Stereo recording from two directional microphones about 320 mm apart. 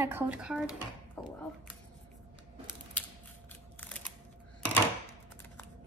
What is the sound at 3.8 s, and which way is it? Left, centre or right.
Camera, centre.